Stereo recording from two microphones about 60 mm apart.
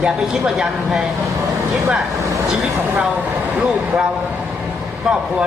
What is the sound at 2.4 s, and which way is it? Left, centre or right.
Speech, centre.